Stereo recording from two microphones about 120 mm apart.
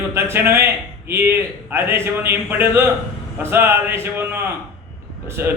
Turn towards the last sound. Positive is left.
turn(degrees=-20)  # may be behind; listen again after turning